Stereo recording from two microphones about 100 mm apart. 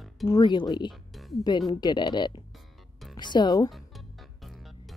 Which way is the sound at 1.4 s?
45° left (ahead or behind).